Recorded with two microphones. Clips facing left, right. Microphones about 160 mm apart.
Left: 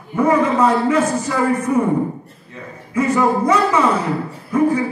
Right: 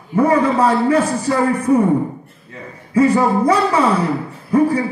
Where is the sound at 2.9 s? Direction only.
30° right (ahead or behind).